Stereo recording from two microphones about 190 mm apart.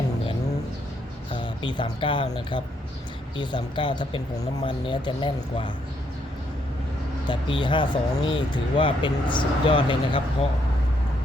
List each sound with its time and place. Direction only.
1.3 s speech: 25° left (ahead or behind)
3.3 s speech: 25° left (ahead or behind)
7.3 s speech: 25° left (ahead or behind)